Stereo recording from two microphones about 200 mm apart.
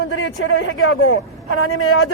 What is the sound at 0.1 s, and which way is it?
A man's voice, 85° left.